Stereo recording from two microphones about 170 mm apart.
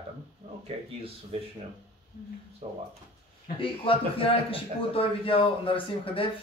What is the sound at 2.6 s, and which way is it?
Speech, 40° right (ahead or behind).